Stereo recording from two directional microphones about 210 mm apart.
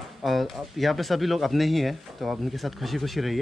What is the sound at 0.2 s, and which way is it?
A man's voice, centre (ahead or behind).